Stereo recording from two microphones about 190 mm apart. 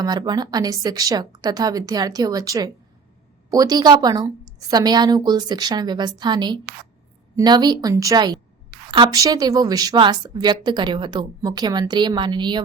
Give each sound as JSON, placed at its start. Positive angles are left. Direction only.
{"t": 0.0, "sound": "speech", "side_deg": -20}